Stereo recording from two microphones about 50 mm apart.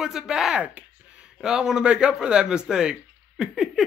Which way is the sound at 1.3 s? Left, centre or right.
Centre.